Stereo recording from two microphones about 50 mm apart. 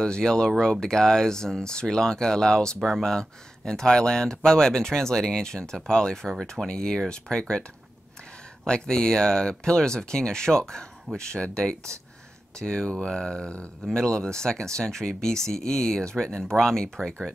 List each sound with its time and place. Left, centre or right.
0.0 s speech: centre
8.6 s speech: centre